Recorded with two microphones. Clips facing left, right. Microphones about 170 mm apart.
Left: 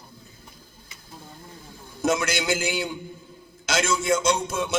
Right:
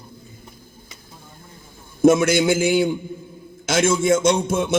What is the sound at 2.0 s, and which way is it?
A man's voice, 55° right (ahead or behind).